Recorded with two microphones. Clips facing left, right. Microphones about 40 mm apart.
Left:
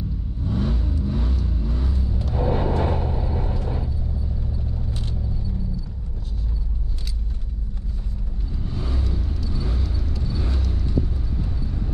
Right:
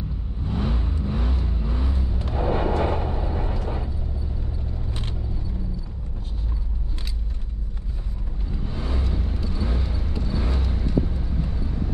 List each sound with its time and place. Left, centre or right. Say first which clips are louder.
0.5 s vehicle: left 2 dB; right
8.6 s vehicle: even; right